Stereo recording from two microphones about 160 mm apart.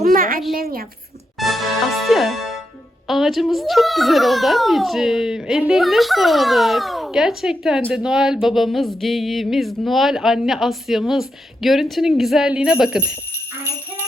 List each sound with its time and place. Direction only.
0.0 s a sound: 60° right (ahead or behind)
0.5 s a woman's voice: 65° right (ahead or behind)
1.4 s a child's voice: centre (ahead or behind)